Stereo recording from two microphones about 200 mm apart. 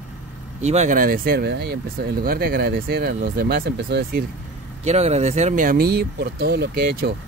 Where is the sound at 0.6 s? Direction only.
35° right (ahead or behind); by 4.2 s 50° right (ahead or behind).